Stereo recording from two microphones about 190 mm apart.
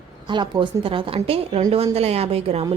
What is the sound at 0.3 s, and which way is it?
A woman's voice, 25° right (ahead or behind).